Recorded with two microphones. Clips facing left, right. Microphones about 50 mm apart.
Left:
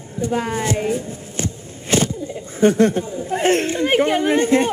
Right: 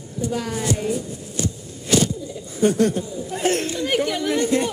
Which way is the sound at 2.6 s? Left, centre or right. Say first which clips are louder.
Left 4 dB; left.